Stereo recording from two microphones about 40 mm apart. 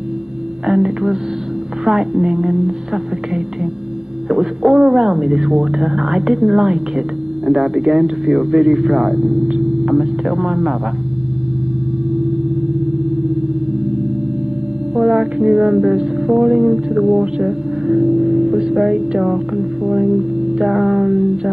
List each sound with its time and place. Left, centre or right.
0.7 s a woman's voice: centre
4.3 s a woman's voice: centre
15.0 s music: centre